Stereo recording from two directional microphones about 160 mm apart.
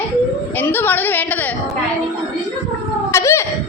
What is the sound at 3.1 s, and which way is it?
Cat, 20° left (ahead or behind).